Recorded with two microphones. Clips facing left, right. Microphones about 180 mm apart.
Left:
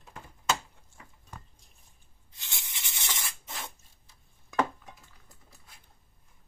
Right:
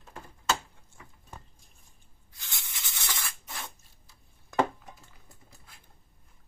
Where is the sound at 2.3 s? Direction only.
20° left (ahead or behind).